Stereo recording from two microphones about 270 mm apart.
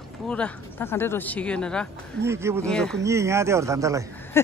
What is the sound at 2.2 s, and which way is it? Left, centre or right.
Speech, centre.